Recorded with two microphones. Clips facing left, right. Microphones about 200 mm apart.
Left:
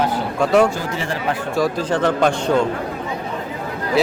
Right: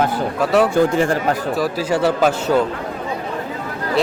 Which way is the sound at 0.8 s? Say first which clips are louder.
Right 9 dB; 50° right (ahead or behind).